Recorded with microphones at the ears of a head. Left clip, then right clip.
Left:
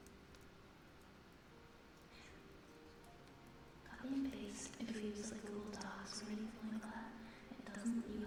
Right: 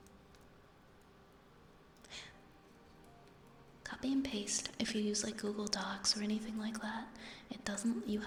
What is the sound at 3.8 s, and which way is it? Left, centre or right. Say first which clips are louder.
Speech: right 7 dB; right.